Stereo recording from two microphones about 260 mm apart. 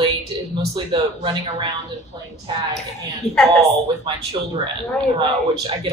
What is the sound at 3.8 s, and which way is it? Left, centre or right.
Speech, right.